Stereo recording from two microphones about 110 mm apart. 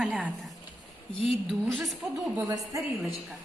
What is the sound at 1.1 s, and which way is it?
A woman's voice, 5° left (ahead or behind).